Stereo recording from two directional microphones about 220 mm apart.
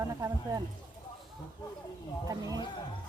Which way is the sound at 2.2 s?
15° right (ahead or behind).